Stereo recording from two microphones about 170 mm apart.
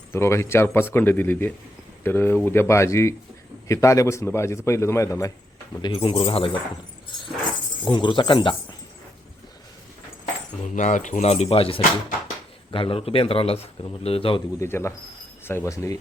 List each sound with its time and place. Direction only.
0.1 s a man's voice: 15° left (ahead or behind)
5.8 s a man's voice: 30° left (ahead or behind)
7.9 s speech: 30° left (ahead or behind)
10.6 s a man's voice: 45° left (ahead or behind)
14.6 s a man's voice: 15° left (ahead or behind)